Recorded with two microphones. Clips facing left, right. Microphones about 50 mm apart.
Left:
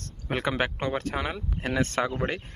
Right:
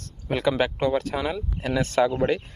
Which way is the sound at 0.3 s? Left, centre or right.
Left.